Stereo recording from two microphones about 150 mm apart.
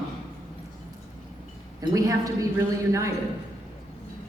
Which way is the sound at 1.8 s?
25° right (ahead or behind).